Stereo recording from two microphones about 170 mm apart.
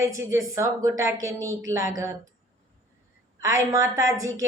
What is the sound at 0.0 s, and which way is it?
Speech, 15° right (ahead or behind).